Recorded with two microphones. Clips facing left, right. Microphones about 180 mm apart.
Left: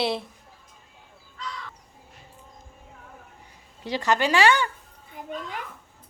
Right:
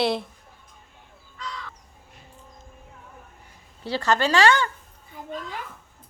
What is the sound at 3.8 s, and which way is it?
Speech, 15° left (ahead or behind).